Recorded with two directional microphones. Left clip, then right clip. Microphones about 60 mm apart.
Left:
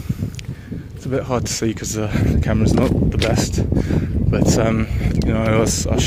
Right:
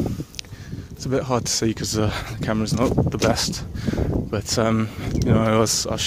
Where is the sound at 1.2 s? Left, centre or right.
Right.